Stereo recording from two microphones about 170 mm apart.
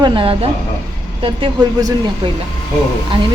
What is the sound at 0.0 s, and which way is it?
Speech, 30° right (ahead or behind).